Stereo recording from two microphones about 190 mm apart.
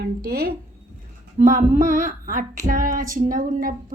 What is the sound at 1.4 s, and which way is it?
A woman's voice, 45° right (ahead or behind).